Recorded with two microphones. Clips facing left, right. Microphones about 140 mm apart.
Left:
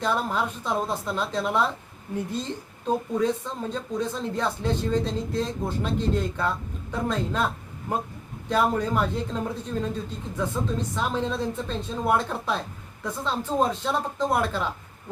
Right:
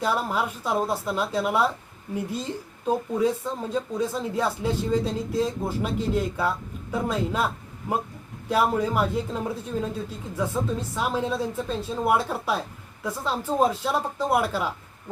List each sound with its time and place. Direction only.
0.0 s a man's voice: 5° right (ahead or behind)